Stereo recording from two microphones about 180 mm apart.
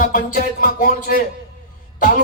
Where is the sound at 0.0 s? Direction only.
50° left (ahead or behind).